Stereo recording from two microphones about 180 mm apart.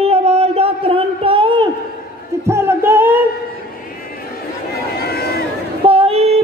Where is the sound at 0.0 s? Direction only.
35° right (ahead or behind).